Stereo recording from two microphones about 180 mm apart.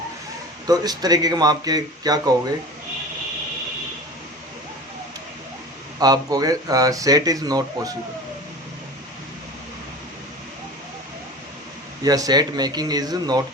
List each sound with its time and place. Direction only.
0.7 s speech: 20° right (ahead or behind)
6.0 s speech: 20° right (ahead or behind)
12.0 s speech: 20° right (ahead or behind)